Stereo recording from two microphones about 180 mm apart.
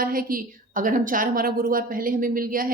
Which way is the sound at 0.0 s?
50° right (ahead or behind).